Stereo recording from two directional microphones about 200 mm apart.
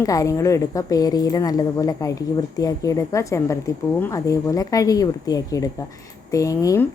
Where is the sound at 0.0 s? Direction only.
15° left (ahead or behind).